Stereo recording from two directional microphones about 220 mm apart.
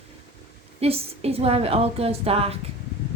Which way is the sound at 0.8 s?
25° right (ahead or behind).